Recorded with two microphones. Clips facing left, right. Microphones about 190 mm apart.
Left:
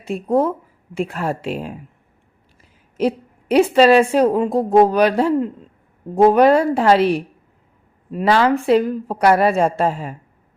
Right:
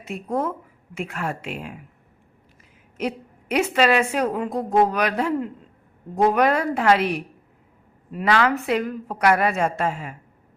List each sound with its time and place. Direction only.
0.0 s a woman's voice: 30° left (ahead or behind)
3.0 s a woman's voice: 30° left (ahead or behind)